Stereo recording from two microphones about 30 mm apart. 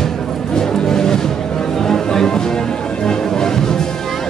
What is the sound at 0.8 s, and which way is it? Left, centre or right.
Music, centre.